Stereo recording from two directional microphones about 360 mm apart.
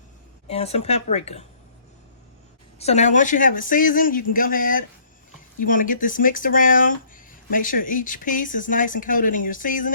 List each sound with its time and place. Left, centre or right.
0.4 s a woman's voice: centre
2.7 s speech: centre